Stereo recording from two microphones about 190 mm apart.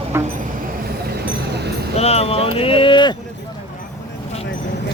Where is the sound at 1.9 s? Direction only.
35° left (ahead or behind).